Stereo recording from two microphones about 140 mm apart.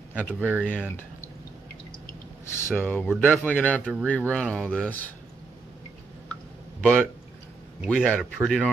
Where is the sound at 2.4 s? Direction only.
20° left (ahead or behind).